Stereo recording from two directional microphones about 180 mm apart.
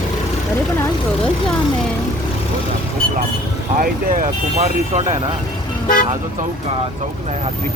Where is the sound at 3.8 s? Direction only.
45° right (ahead or behind).